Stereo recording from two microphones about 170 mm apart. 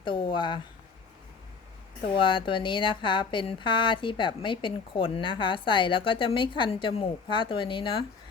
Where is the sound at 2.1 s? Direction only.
30° left (ahead or behind).